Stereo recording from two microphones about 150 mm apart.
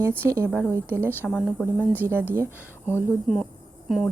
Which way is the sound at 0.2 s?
15° right (ahead or behind).